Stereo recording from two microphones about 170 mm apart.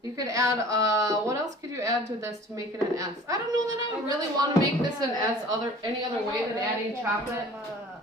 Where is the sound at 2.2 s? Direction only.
20° right (ahead or behind).